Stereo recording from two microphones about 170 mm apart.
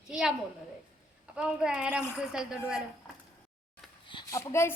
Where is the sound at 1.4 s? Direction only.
5° right (ahead or behind).